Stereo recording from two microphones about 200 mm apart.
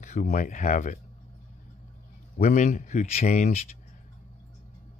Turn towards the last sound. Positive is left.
turn(degrees=35)  # may be behind; listen again after turning